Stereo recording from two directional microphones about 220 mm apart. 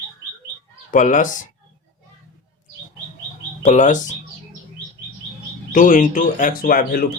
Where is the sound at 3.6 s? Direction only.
35° left (ahead or behind).